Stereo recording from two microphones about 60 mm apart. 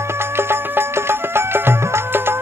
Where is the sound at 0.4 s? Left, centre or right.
Right.